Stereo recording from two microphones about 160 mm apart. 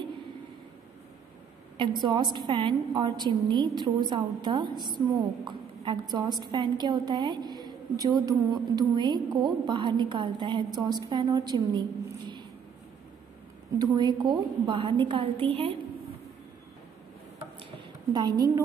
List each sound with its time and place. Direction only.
1.8 s a woman's voice: 30° right (ahead or behind)
13.9 s a woman's voice: 25° right (ahead or behind)
18.1 s a woman's voice: 25° right (ahead or behind)